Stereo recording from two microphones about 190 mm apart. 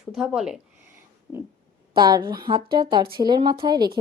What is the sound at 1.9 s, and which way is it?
A woman's voice, 25° right (ahead or behind).